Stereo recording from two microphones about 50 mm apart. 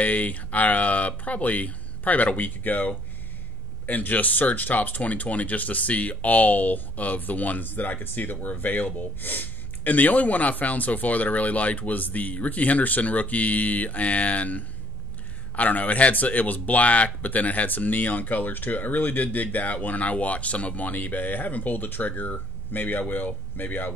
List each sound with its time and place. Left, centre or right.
0.0 s speech: left